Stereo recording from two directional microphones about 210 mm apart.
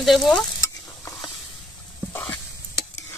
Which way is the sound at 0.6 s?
15° left (ahead or behind).